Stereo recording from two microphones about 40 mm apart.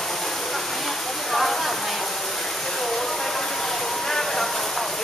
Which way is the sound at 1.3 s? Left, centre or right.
Centre.